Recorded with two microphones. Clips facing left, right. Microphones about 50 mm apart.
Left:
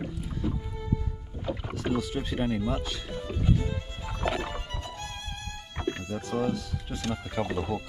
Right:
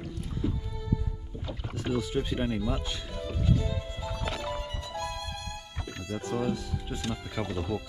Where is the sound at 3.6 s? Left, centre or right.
Left.